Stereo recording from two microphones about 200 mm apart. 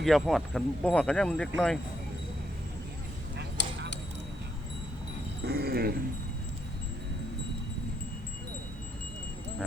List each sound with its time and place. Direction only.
0.0 s speech: centre (ahead or behind)
3.6 s honk: 60° left (ahead or behind)
5.5 s dog: 50° right (ahead or behind)